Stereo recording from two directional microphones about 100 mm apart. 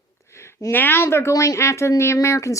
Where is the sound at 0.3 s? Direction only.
25° left (ahead or behind).